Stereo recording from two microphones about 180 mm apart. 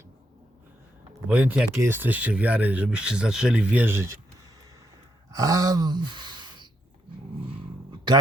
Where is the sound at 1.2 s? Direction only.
10° right (ahead or behind).